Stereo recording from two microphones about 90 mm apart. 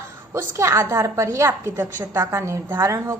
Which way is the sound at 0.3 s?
30° right (ahead or behind).